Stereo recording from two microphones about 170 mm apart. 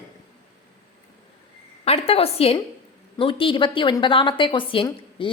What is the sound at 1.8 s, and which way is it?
A woman's voice, 35° left (ahead or behind).